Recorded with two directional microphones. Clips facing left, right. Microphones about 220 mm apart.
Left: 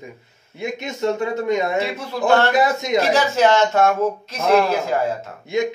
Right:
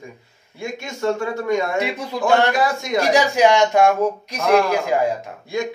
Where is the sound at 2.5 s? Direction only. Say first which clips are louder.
Left 2 dB; 20° left (ahead or behind).